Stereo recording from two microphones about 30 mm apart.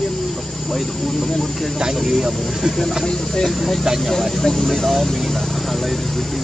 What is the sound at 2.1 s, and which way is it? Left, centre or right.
Speech, centre.